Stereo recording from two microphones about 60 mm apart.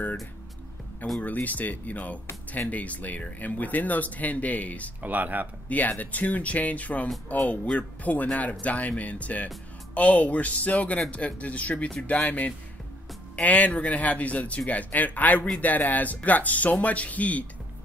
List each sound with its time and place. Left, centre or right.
1.2 s speech: left
5.0 s speech: right
5.7 s speech: left